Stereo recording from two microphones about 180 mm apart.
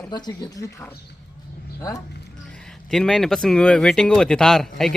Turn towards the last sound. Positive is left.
turn(degrees=0)  # may be behind; listen again after turning